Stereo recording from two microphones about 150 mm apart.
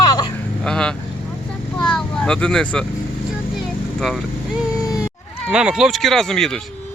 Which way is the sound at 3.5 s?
Centre (ahead or behind).